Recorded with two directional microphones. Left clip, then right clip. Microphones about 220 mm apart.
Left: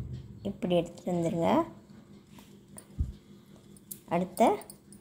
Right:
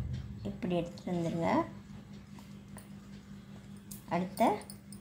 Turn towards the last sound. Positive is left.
turn(degrees=30)  # may be behind; listen again after turning